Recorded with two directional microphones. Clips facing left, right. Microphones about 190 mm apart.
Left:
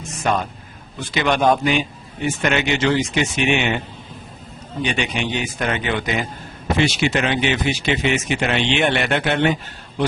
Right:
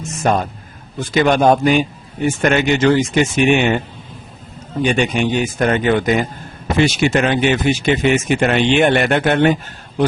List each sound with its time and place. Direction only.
0.2 s a man's voice: 45° right (ahead or behind)
4.8 s a man's voice: 45° right (ahead or behind)